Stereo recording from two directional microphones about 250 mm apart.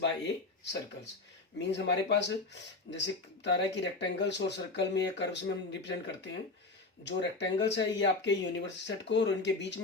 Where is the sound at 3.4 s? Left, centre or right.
Left.